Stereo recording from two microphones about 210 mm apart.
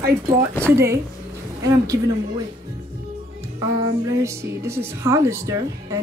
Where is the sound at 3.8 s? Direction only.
15° right (ahead or behind).